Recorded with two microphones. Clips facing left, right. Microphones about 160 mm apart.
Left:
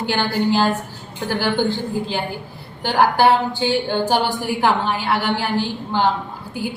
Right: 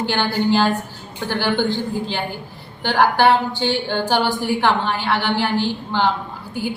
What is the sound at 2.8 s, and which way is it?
A woman's voice, 5° left (ahead or behind).